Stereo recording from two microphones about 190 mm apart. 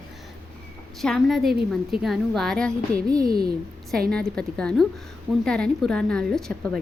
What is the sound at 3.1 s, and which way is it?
Speech, 20° right (ahead or behind).